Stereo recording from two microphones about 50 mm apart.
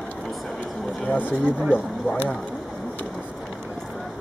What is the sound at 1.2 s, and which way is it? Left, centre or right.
Speech, right.